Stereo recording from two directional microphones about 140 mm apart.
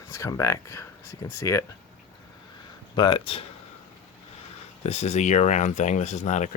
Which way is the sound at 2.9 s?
35° left (ahead or behind).